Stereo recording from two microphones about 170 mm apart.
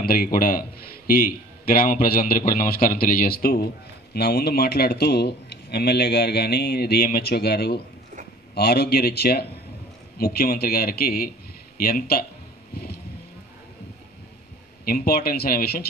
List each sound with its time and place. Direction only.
0.0 s a man's voice: 60° left (ahead or behind)
12.7 s vehicle: 70° left (ahead or behind)
14.9 s a man's voice: 65° left (ahead or behind)